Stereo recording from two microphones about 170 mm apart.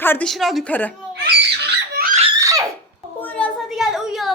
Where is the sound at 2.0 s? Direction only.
65° right (ahead or behind).